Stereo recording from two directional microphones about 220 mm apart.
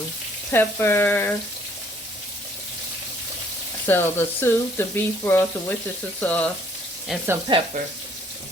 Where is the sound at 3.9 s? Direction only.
10° left (ahead or behind).